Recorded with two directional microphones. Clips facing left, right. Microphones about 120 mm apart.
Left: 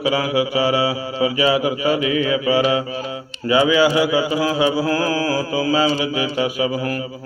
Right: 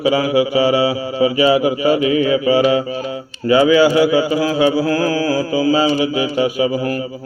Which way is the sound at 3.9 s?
35° right (ahead or behind).